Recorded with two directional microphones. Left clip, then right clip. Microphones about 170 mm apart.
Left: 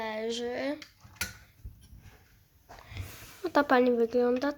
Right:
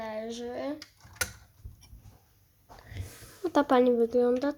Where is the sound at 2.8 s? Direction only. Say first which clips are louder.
Left 2 dB; 15° right (ahead or behind).